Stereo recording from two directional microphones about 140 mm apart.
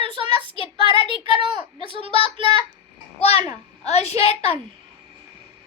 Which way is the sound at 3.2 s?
45° left (ahead or behind).